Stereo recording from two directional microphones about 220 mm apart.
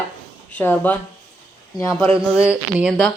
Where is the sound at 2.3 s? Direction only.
5° right (ahead or behind).